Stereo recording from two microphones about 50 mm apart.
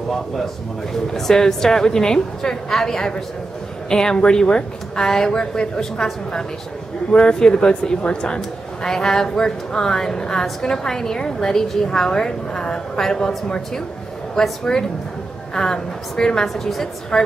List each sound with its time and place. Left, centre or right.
1.1 s a woman's voice: centre
7.1 s a woman's voice: centre
14.3 s a woman's voice: centre